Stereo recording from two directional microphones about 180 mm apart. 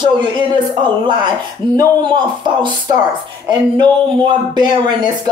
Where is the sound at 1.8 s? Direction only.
25° right (ahead or behind).